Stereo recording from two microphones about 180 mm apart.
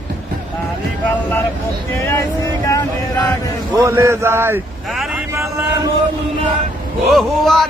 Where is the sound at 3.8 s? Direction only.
15° right (ahead or behind).